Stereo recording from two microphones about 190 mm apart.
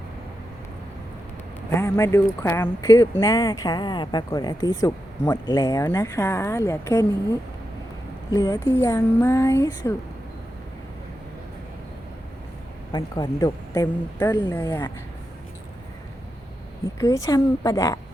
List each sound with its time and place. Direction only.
1.7 s speech: 15° left (ahead or behind)
8.3 s speech: 15° left (ahead or behind)
12.9 s speech: 20° left (ahead or behind)
17.0 s speech: 15° left (ahead or behind)